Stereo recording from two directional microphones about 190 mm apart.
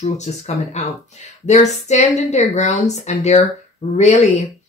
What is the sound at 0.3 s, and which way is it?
Speech, 40° left (ahead or behind).